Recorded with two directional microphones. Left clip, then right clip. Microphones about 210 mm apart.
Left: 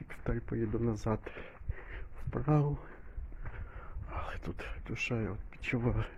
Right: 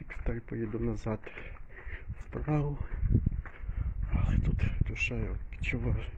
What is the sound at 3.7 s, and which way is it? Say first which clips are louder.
Speech: right 2 dB; 15° left (ahead or behind).